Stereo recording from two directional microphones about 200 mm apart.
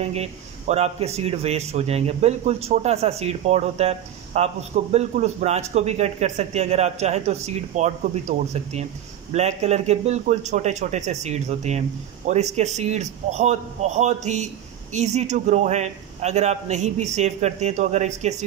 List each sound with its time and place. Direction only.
0.0 s a man's voice: 30° right (ahead or behind)